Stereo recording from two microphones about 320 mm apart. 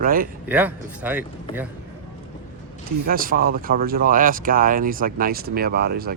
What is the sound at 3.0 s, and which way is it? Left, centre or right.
Speech, right.